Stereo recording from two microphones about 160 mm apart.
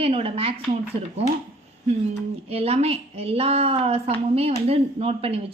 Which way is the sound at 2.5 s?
40° right (ahead or behind).